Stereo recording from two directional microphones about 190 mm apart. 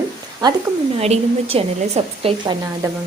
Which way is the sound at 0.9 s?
35° right (ahead or behind).